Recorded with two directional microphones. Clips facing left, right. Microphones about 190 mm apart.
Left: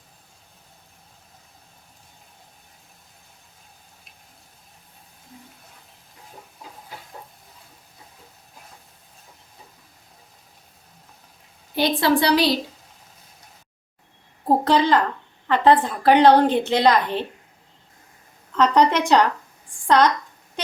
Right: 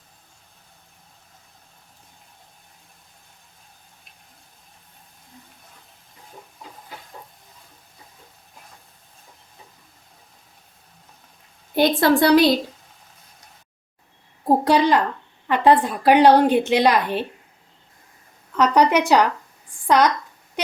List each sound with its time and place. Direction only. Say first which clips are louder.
6.6 s hiss: even; centre (ahead or behind)
11.8 s a woman's voice: right 3 dB; 50° right (ahead or behind)
14.4 s a sound: right 1 dB; 15° right (ahead or behind)
15.4 s a woman's voice: even; 10° right (ahead or behind)
18.5 s a woman's voice: right 1 dB; 10° right (ahead or behind)